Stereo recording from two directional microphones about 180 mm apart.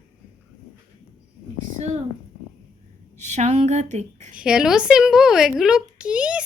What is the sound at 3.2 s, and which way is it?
Speech, 40° right (ahead or behind).